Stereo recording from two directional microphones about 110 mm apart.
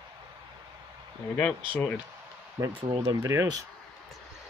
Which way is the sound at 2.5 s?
30° right (ahead or behind).